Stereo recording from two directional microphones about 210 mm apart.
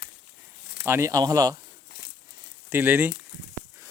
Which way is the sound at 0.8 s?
15° right (ahead or behind).